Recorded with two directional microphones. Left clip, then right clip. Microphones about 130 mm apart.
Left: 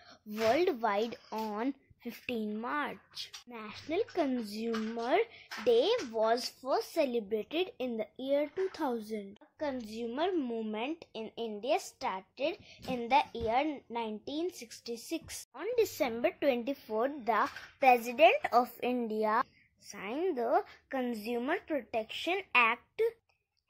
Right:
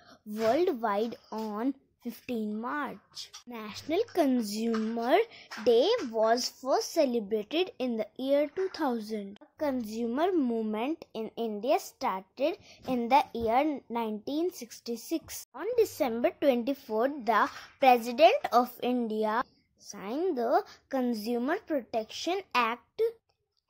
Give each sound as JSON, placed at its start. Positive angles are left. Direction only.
{"t": 0.5, "sound": "a woman's voice", "side_deg": -20}
{"t": 1.3, "sound": "speech", "side_deg": -5}
{"t": 1.6, "sound": "speech", "side_deg": -15}
{"t": 3.4, "sound": "speech", "side_deg": -40}
{"t": 19.9, "sound": "a woman's voice", "side_deg": -30}
{"t": 21.0, "sound": "speech", "side_deg": -40}
{"t": 22.2, "sound": "speech", "side_deg": -45}